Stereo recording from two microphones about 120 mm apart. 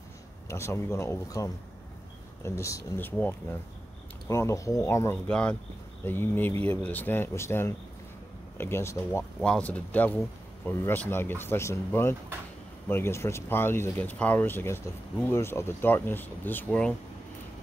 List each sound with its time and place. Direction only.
0.5 s speech: 20° left (ahead or behind)
4.3 s speech: 25° left (ahead or behind)
5.3 s speech: 10° left (ahead or behind)
9.4 s speech: 10° left (ahead or behind)